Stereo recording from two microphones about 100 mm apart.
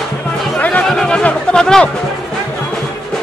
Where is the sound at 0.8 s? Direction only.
5° left (ahead or behind).